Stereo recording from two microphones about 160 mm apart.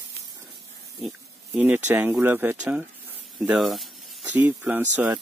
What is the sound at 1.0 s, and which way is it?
Pig, centre (ahead or behind).